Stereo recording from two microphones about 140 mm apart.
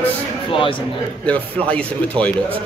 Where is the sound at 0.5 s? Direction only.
40° left (ahead or behind).